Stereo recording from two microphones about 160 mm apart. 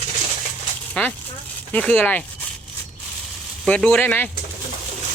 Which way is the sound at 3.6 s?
5° left (ahead or behind).